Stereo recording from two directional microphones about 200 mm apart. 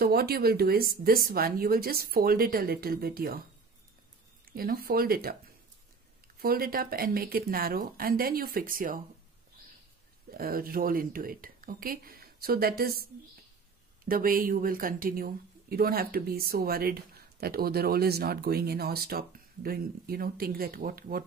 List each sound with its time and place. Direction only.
0.0 s speech: 50° right (ahead or behind)
4.5 s speech: 50° right (ahead or behind)
6.4 s speech: 50° right (ahead or behind)
10.3 s speech: 45° right (ahead or behind)